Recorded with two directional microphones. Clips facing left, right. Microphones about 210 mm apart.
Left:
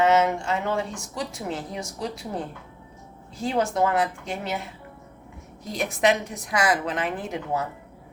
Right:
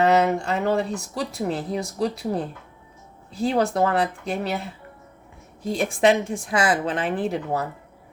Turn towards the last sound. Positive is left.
turn(degrees=-35)  # may be behind; listen again after turning